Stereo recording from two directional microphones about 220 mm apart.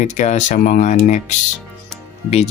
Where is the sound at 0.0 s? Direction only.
35° left (ahead or behind).